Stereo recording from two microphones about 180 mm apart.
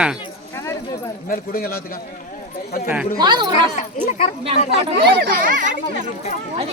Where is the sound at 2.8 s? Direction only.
5° right (ahead or behind).